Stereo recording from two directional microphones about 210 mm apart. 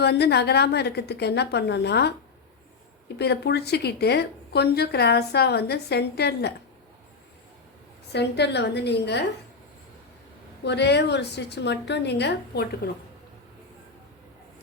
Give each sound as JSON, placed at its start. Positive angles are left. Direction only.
{"t": 0.0, "sound": "a woman's voice", "side_deg": 50}
{"t": 3.2, "sound": "a woman's voice", "side_deg": 50}
{"t": 8.1, "sound": "a woman's voice", "side_deg": 55}
{"t": 10.6, "sound": "a woman's voice", "side_deg": 55}